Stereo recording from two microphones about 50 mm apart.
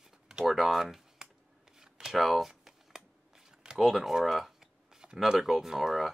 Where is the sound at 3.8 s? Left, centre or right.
Centre.